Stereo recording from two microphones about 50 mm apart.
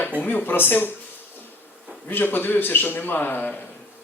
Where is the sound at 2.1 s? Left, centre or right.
Left.